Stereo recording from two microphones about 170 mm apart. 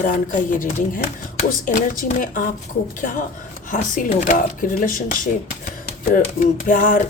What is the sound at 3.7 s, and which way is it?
Speech, 50° left (ahead or behind).